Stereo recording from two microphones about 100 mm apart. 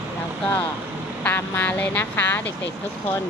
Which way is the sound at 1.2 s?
15° left (ahead or behind).